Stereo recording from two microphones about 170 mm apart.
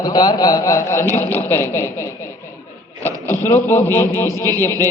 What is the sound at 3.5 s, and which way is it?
Speech, 15° left (ahead or behind).